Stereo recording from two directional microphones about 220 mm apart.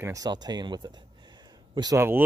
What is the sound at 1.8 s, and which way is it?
Speech, 15° right (ahead or behind).